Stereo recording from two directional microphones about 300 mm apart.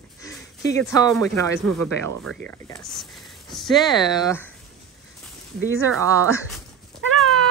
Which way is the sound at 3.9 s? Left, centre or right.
Centre.